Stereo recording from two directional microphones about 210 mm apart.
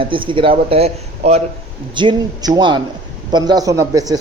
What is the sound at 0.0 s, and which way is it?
A man's voice, 25° right (ahead or behind).